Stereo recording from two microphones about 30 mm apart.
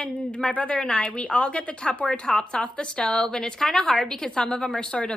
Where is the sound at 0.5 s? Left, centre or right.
Left.